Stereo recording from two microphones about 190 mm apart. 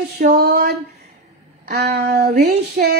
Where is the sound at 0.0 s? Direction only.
60° right (ahead or behind).